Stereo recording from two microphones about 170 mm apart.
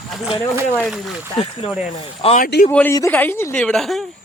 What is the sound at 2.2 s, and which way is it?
Speech, 35° left (ahead or behind).